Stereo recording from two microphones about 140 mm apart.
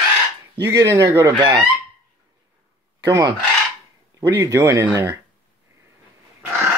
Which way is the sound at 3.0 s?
25° right (ahead or behind).